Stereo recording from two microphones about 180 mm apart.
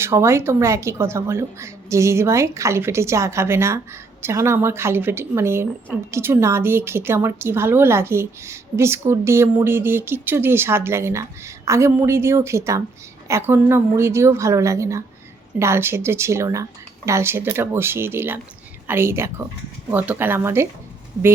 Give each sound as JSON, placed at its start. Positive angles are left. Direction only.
{"t": 0.0, "sound": "a woman's voice", "side_deg": -15}